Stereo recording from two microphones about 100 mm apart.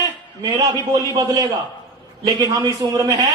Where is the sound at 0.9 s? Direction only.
40° right (ahead or behind).